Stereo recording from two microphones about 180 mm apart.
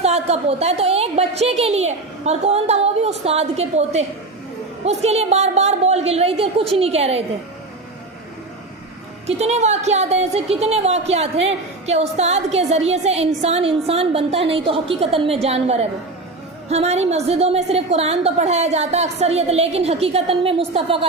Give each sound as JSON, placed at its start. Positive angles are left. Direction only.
{"t": 0.0, "sound": "a woman's voice", "side_deg": -35}
{"t": 9.2, "sound": "a woman's voice", "side_deg": -35}